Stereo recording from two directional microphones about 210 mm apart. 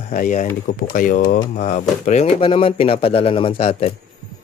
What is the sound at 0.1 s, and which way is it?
Speech, 35° left (ahead or behind).